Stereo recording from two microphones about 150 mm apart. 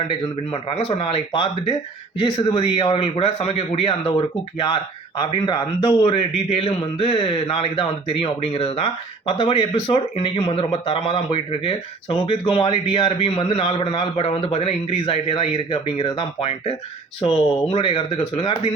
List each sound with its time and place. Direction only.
0.1 s a man's voice: 40° left (ahead or behind)